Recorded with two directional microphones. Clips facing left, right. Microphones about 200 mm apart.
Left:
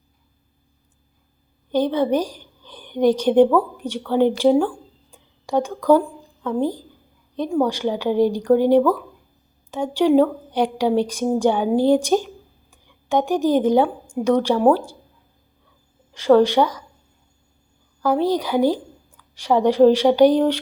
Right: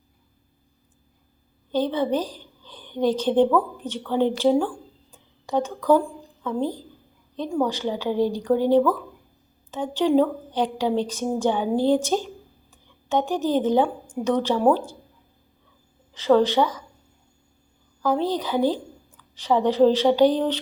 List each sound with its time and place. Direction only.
1.7 s a woman's voice: 15° left (ahead or behind)
5.1 s a sound: 10° left (ahead or behind)
6.4 s a woman's voice: 15° left (ahead or behind)
16.1 s a woman's voice: 15° left (ahead or behind)
18.0 s a woman's voice: 10° left (ahead or behind)